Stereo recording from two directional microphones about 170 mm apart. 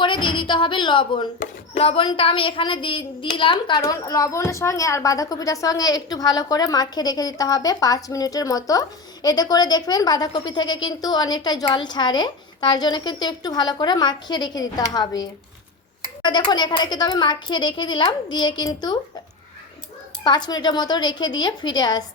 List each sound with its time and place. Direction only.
0.0 s a woman's voice: 30° left (ahead or behind)
1.4 s speech: 40° left (ahead or behind)
3.8 s a woman's voice: 20° left (ahead or behind)
20.2 s a woman's voice: 25° left (ahead or behind)